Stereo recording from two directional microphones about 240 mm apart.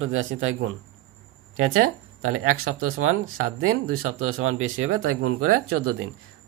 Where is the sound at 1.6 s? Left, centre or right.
Right.